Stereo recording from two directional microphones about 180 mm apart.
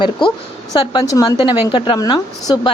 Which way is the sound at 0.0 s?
25° left (ahead or behind).